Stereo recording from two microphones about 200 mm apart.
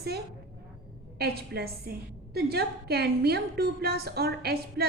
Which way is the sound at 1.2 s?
50° right (ahead or behind).